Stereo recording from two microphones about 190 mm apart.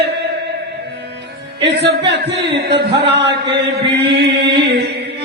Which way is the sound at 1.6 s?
65° right (ahead or behind).